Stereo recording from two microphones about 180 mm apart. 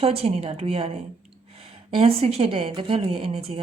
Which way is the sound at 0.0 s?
35° right (ahead or behind).